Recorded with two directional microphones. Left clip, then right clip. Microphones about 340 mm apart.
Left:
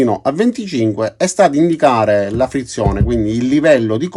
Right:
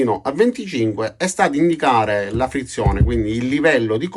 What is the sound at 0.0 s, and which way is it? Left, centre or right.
Speech, centre.